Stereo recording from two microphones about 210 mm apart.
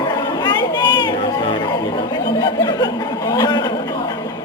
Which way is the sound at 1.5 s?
20° left (ahead or behind).